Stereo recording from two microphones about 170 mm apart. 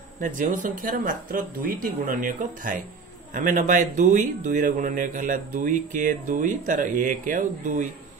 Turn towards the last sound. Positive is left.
turn(degrees=-50)  # may be behind; listen again after turning